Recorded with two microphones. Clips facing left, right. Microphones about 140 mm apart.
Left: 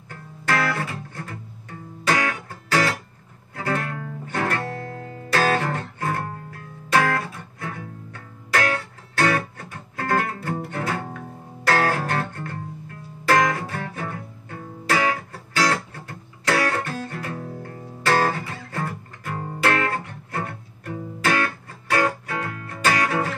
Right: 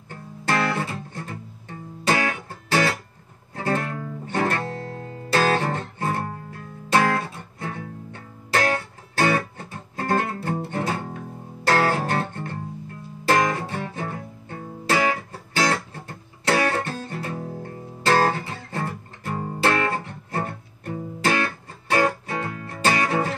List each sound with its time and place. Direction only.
0.1 s music: 25° right (ahead or behind)
9.6 s guitar: 30° right (ahead or behind)
11.6 s music: 30° right (ahead or behind)